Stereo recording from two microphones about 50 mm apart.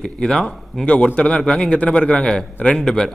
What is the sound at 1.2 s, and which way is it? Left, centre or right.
A man's voice, left.